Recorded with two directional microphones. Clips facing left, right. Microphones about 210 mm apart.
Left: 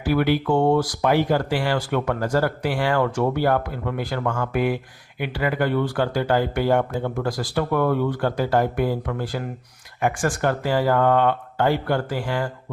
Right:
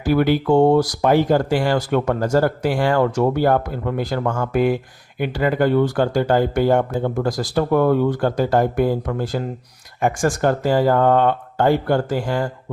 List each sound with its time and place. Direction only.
0.1 s speech: 40° right (ahead or behind)